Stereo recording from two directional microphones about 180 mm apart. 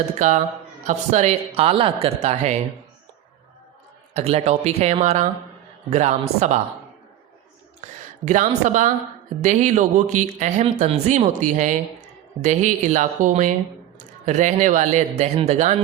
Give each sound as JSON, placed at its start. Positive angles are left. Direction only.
{"t": 0.2, "sound": "a man's voice", "side_deg": -40}
{"t": 4.1, "sound": "speech", "side_deg": -35}
{"t": 8.2, "sound": "a man's voice", "side_deg": -40}